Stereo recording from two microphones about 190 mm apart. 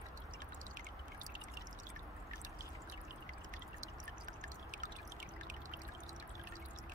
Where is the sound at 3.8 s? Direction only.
45° right (ahead or behind).